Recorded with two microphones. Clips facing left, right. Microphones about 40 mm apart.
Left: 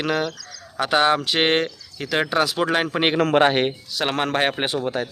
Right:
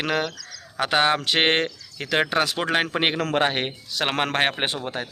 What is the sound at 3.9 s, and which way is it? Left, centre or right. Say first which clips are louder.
Speech: left 1 dB; right.